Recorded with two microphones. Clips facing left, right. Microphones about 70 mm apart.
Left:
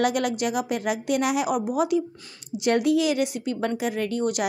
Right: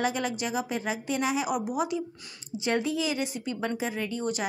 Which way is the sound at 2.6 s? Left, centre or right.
Left.